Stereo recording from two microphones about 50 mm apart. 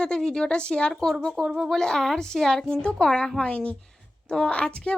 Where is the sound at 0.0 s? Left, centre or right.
Centre.